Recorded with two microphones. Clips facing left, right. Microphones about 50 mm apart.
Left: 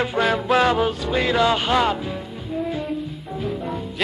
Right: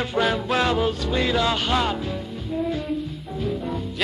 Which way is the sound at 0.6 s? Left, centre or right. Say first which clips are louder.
Left 4 dB; left.